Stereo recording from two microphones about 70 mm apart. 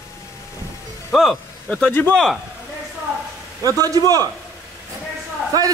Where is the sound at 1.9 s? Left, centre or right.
Left.